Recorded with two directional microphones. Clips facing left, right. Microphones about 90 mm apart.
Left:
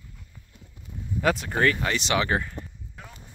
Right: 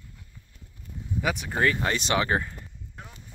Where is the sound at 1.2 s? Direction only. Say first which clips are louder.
Left 5 dB; 10° right (ahead or behind).